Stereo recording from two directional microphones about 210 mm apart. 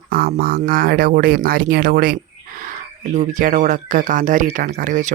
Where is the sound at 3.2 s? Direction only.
35° right (ahead or behind).